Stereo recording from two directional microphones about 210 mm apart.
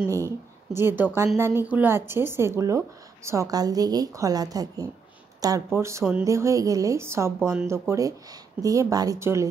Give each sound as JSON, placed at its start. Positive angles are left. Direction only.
{"t": 0.0, "sound": "a woman's voice", "side_deg": -15}